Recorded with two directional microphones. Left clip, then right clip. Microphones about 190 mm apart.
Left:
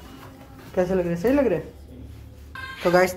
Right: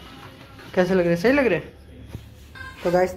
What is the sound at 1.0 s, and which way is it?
Speech, 20° right (ahead or behind).